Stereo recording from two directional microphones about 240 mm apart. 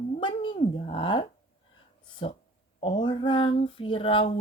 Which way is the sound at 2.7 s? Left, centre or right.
Left.